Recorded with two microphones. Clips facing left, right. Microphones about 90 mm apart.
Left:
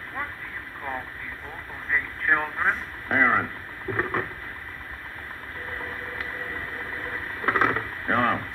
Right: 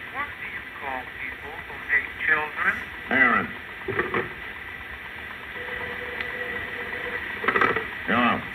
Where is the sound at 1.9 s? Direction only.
25° left (ahead or behind).